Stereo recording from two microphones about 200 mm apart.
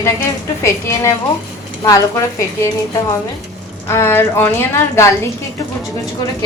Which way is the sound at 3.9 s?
10° left (ahead or behind).